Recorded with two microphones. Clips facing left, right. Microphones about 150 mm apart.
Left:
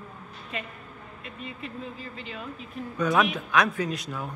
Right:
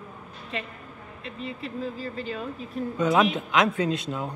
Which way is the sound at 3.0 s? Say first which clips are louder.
Right 2 dB; 25° right (ahead or behind).